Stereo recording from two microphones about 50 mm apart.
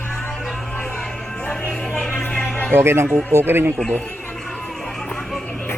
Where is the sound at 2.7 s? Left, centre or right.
Right.